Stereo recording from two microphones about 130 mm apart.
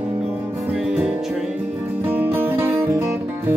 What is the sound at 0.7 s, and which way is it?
Music, 10° right (ahead or behind).